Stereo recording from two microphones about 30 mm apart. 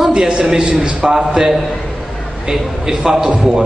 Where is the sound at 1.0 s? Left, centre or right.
Right.